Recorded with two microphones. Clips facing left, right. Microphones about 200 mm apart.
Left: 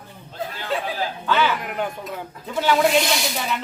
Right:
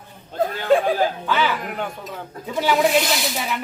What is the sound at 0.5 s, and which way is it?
Chuckle, 50° right (ahead or behind).